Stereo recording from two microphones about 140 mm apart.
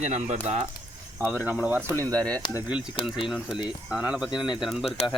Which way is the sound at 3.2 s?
5° right (ahead or behind).